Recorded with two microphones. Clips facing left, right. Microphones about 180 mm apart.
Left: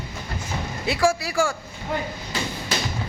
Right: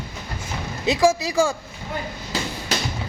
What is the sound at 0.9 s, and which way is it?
Speech, 20° right (ahead or behind).